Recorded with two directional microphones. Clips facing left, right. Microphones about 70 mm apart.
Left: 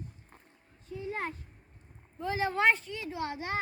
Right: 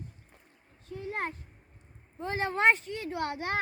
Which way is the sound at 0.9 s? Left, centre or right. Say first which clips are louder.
Right 1 dB; right.